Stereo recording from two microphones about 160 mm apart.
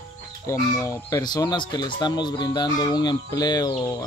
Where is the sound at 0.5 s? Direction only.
15° left (ahead or behind).